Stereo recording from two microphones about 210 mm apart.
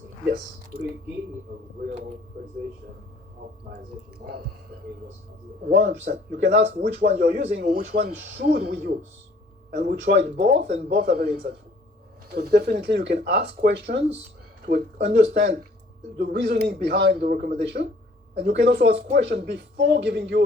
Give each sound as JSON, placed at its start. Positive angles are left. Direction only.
{"t": 5.6, "sound": "speech", "side_deg": -45}
{"t": 6.4, "sound": "speech", "side_deg": -55}
{"t": 7.8, "sound": "speech", "side_deg": -35}
{"t": 8.4, "sound": "speech", "side_deg": -45}
{"t": 10.8, "sound": "speech", "side_deg": -45}
{"t": 12.4, "sound": "speech", "side_deg": -50}